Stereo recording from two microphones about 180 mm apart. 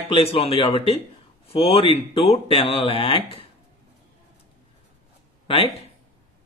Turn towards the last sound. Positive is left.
turn(degrees=30)  # may be behind; listen again after turning